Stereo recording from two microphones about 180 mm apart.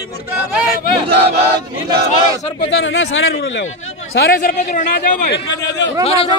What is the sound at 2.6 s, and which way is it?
Speech, 90° left.